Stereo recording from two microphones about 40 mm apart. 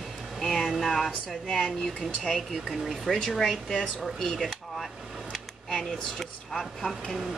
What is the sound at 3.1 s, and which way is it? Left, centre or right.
Speech, centre.